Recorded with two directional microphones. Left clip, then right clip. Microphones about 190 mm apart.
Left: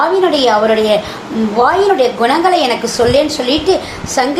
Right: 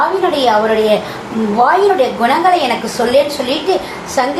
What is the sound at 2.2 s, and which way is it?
A woman's voice, 50° left (ahead or behind).